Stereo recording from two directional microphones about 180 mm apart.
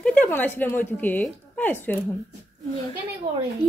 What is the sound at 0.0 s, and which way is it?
A woman's voice, 5° left (ahead or behind).